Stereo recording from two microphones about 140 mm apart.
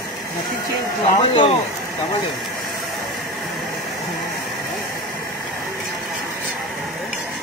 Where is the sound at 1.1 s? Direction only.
30° left (ahead or behind).